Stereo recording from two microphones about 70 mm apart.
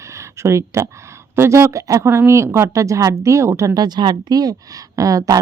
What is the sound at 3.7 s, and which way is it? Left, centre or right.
A woman's voice, right.